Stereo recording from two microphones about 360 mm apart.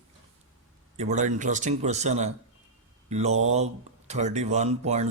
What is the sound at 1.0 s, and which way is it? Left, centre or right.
Speech, centre.